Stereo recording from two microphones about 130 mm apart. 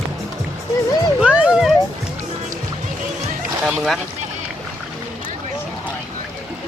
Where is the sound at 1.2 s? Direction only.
5° right (ahead or behind).